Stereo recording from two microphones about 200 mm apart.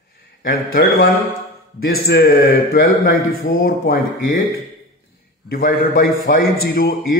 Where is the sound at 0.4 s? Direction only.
50° left (ahead or behind).